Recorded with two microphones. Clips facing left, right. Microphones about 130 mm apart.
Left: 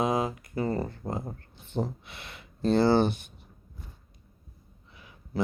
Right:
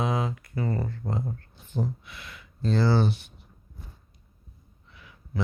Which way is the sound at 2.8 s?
55° left (ahead or behind).